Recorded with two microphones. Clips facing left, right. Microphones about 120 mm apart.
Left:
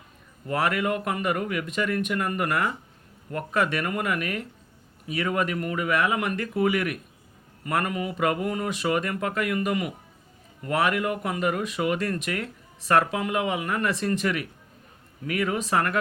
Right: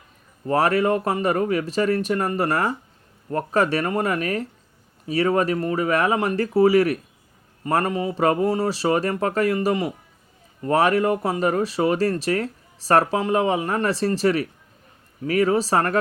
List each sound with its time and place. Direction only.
0.4 s speech: 35° right (ahead or behind)